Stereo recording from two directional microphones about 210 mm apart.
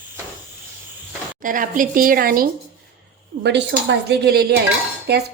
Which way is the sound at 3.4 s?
55° right (ahead or behind).